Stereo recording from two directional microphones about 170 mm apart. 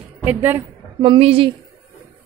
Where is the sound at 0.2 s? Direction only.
10° right (ahead or behind).